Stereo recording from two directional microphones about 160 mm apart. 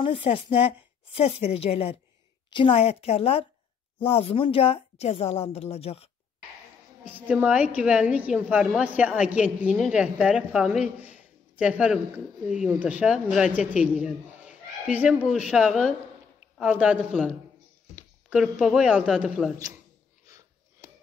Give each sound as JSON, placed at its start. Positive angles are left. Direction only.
{"t": 0.0, "sound": "a woman's voice", "side_deg": 35}
{"t": 7.1, "sound": "a woman's voice", "side_deg": -10}
{"t": 17.1, "sound": "speech", "side_deg": 5}
{"t": 18.6, "sound": "speech", "side_deg": -5}
{"t": 20.2, "sound": "a sound", "side_deg": -20}